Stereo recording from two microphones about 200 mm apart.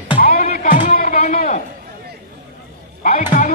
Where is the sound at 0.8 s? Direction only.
40° left (ahead or behind).